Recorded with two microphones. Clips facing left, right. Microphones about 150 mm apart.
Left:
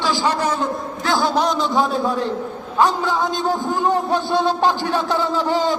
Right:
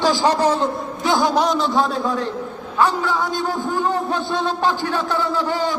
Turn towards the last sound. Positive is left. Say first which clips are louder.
# left 2 dB
turn(degrees=15)  # may be behind; listen again after turning